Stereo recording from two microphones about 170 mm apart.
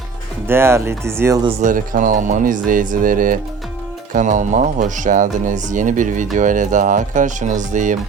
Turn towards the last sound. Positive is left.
turn(degrees=-45)  # may be behind; listen again after turning